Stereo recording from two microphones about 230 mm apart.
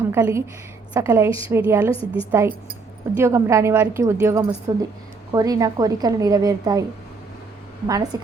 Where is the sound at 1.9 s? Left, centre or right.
Left.